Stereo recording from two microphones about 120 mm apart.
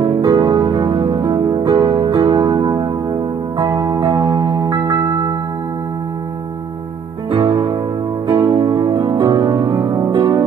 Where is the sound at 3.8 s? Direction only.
35° right (ahead or behind).